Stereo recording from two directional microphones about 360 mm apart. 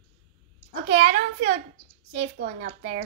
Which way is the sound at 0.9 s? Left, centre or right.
Right.